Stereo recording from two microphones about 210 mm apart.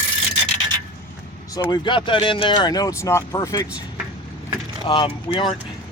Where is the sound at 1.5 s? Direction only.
20° left (ahead or behind).